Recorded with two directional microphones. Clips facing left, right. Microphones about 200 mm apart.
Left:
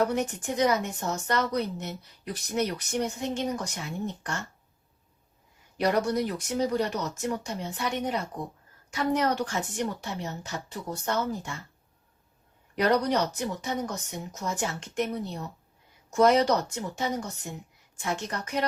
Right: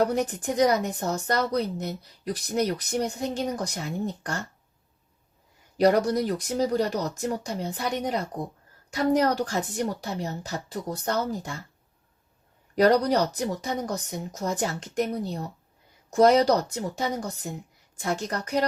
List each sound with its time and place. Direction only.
0.0 s speech: 35° right (ahead or behind)
5.7 s speech: 35° right (ahead or behind)
12.7 s speech: 35° right (ahead or behind)